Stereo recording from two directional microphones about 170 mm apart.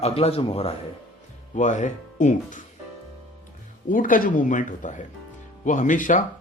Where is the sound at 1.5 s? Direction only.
45° left (ahead or behind).